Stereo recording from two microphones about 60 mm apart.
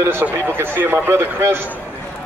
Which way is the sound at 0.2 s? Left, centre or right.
Right.